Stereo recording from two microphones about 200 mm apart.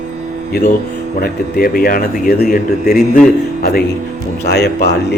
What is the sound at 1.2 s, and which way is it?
A man's voice, 50° left (ahead or behind).